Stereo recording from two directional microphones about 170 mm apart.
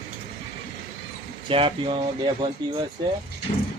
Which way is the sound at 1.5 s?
35° right (ahead or behind).